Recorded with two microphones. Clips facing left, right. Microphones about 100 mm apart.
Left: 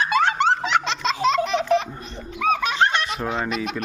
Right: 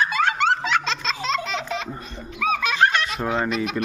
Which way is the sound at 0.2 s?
25° left (ahead or behind).